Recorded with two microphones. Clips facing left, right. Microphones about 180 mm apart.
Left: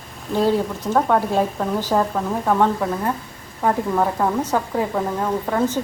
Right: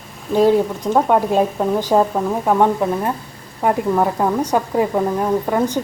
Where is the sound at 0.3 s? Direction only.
15° right (ahead or behind).